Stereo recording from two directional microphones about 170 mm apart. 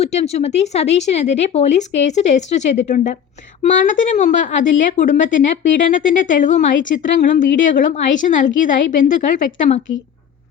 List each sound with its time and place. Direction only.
0.0 s a woman's voice: 40° left (ahead or behind)